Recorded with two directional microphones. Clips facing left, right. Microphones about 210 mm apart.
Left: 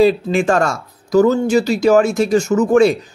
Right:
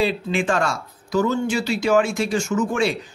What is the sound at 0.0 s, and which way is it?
Speech, 40° left (ahead or behind).